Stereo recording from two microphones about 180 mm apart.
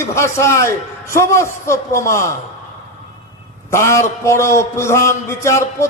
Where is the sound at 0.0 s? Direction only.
15° left (ahead or behind).